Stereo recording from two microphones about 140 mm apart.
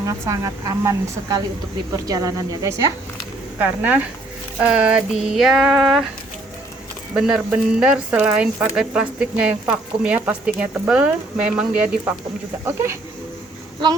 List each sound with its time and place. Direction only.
0.0 s a woman's voice: 25° right (ahead or behind)
3.6 s speech: 10° right (ahead or behind)
4.6 s a sound: 10° right (ahead or behind)
7.1 s speech: 5° right (ahead or behind)
12.6 s a woman's voice: 20° right (ahead or behind)